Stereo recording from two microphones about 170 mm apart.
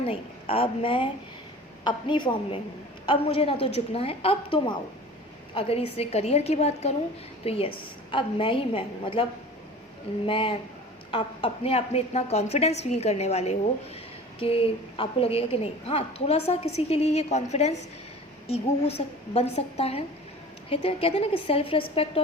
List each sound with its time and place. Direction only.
0.0 s a woman's voice: 35° left (ahead or behind)
10.2 s a woman's voice: 30° left (ahead or behind)